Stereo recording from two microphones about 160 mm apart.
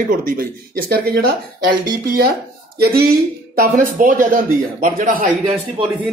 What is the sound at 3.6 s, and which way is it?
Speech, 60° right (ahead or behind).